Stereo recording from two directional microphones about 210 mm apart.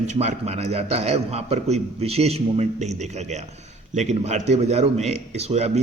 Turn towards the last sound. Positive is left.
turn(degrees=-30)  # may be behind; listen again after turning